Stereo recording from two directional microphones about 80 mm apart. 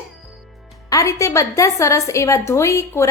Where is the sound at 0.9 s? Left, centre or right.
Left.